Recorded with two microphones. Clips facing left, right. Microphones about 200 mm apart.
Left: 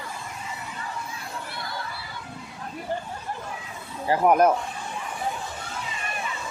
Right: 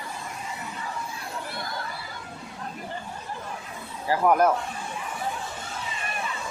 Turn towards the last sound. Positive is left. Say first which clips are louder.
# left 2 dB
turn(degrees=20)  # may be behind; listen again after turning